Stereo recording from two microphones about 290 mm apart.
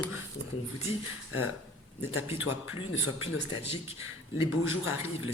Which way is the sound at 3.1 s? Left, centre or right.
Left.